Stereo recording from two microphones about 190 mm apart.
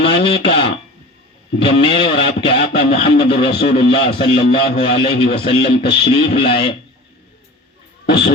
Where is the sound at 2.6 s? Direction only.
55° left (ahead or behind).